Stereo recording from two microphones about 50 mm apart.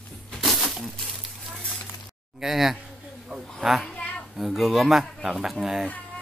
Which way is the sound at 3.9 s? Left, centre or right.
Left.